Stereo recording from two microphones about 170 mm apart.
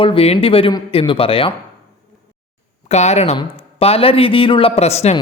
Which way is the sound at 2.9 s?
40° left (ahead or behind).